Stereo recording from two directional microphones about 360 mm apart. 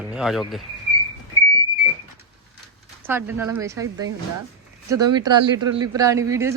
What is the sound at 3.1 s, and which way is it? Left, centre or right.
Speech, centre.